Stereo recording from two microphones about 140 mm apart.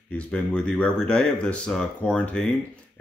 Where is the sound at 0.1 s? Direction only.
10° left (ahead or behind).